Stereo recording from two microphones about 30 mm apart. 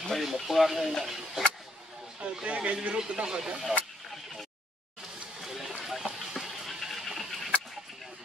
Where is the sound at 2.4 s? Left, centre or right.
Right.